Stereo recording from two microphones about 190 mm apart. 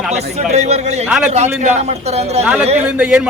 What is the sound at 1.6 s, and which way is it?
Speech, 35° right (ahead or behind).